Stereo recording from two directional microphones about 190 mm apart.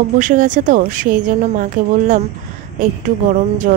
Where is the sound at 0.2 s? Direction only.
45° right (ahead or behind).